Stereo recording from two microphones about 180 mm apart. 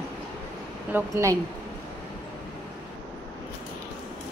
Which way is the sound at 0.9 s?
15° right (ahead or behind).